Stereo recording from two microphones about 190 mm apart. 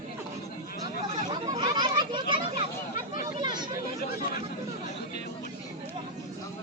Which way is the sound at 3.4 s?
25° right (ahead or behind).